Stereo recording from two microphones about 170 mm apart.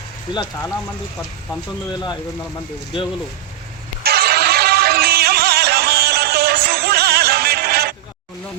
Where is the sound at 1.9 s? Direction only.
25° left (ahead or behind).